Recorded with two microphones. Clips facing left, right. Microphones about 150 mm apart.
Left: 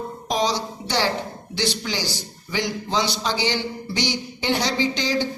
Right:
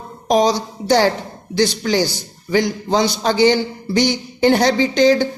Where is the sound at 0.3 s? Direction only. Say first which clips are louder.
Right 8 dB; 45° right (ahead or behind).